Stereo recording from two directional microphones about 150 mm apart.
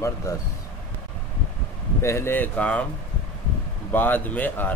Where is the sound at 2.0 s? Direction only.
15° left (ahead or behind).